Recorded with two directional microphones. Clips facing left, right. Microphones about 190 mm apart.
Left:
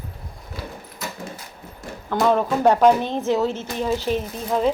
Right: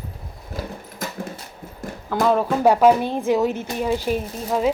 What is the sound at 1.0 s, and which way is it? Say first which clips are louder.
Dog: right 2 dB; 50° right (ahead or behind).